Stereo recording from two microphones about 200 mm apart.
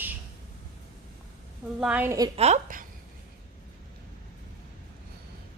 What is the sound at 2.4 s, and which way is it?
Speech, 40° right (ahead or behind).